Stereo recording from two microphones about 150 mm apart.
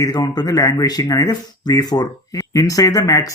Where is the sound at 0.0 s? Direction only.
25° left (ahead or behind).